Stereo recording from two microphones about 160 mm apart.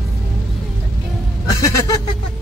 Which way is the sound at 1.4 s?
20° left (ahead or behind).